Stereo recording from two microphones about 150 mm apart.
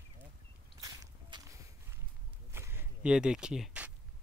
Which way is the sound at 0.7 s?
25° right (ahead or behind).